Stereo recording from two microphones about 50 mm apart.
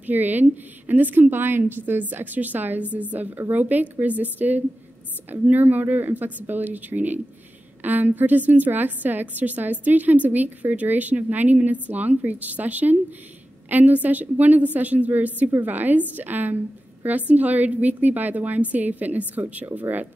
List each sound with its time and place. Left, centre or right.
0.0 s a woman's voice: right